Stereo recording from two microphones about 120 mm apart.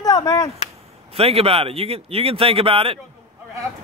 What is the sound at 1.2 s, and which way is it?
Speech, 55° right (ahead or behind).